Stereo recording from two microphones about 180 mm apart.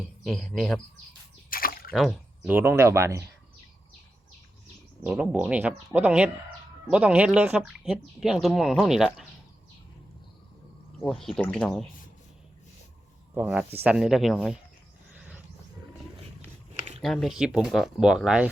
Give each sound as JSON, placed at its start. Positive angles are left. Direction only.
{"t": 0.3, "sound": "speech", "side_deg": 0}
{"t": 1.5, "sound": "a sound", "side_deg": 55}
{"t": 1.9, "sound": "speech", "side_deg": 5}
{"t": 2.4, "sound": "speech", "side_deg": -10}
{"t": 5.0, "sound": "speech", "side_deg": -5}
{"t": 11.0, "sound": "speech", "side_deg": 0}
{"t": 13.3, "sound": "speech", "side_deg": -10}
{"t": 15.1, "sound": "wild animals", "side_deg": -5}
{"t": 17.0, "sound": "speech", "side_deg": 0}